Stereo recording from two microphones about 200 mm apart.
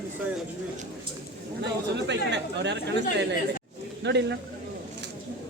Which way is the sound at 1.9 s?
60° right (ahead or behind).